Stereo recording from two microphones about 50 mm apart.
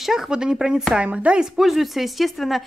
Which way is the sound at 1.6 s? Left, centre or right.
Centre.